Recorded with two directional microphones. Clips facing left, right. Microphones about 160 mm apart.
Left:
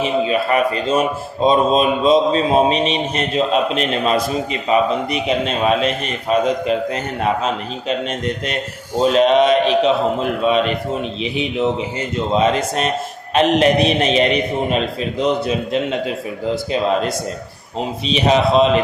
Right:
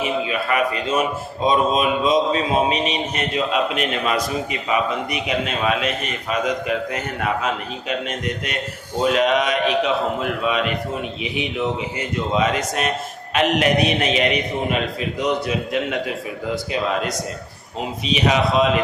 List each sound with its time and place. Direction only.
0.0 s a man's voice: 30° left (ahead or behind)
9.0 s a man's voice: 30° left (ahead or behind)
11.2 s a man's voice: 30° left (ahead or behind)
15.2 s a man's voice: 25° left (ahead or behind)
18.1 s a man's voice: 30° left (ahead or behind)